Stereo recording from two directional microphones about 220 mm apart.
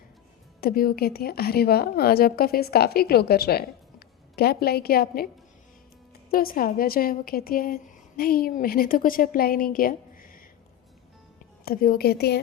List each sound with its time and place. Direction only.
0.6 s a woman's voice: 40° left (ahead or behind)
6.3 s a woman's voice: 40° left (ahead or behind)
11.6 s a woman's voice: 40° left (ahead or behind)